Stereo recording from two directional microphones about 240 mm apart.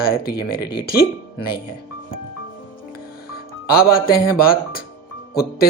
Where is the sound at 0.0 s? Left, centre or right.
Left.